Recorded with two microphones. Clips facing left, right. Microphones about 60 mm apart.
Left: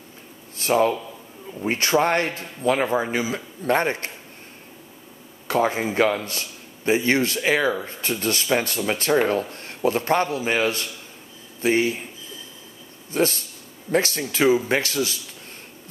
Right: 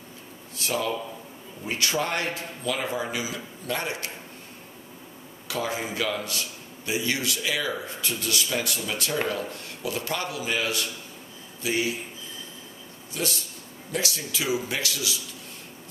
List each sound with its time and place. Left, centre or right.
0.6 s a man's voice: left
5.5 s a man's voice: left
13.1 s a man's voice: left